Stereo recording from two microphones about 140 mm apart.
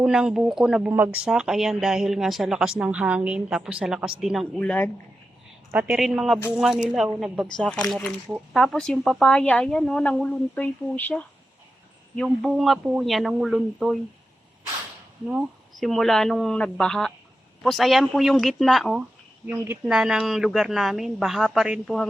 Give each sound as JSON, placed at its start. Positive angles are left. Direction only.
{"t": 0.0, "sound": "speech", "side_deg": -5}
{"t": 5.7, "sound": "a man's voice", "side_deg": -10}
{"t": 12.1, "sound": "speech", "side_deg": 0}
{"t": 12.8, "sound": "a man's voice", "side_deg": -10}
{"t": 13.1, "sound": "speech", "side_deg": 0}
{"t": 15.3, "sound": "speech", "side_deg": 0}
{"t": 19.5, "sound": "speech", "side_deg": -15}